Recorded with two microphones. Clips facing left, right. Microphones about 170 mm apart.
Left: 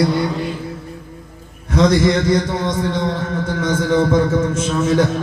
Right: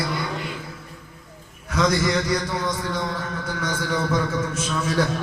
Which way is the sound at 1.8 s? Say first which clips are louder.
Left 7 dB; 25° left (ahead or behind).